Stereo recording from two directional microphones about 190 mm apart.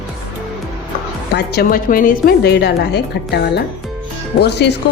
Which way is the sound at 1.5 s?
55° left (ahead or behind).